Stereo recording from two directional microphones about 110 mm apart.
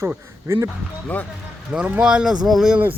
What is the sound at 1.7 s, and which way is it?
Speech, 10° right (ahead or behind).